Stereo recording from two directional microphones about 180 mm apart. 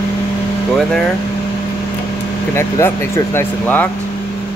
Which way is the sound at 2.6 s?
15° left (ahead or behind).